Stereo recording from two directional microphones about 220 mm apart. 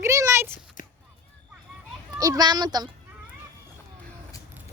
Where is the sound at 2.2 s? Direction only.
15° right (ahead or behind).